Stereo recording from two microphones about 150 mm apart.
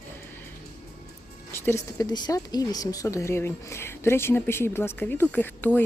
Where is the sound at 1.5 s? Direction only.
20° left (ahead or behind).